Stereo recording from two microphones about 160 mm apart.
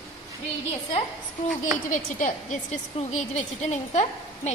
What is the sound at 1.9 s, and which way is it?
A woman's voice, 50° left (ahead or behind).